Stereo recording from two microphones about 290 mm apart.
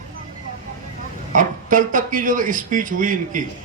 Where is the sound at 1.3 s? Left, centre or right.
Right.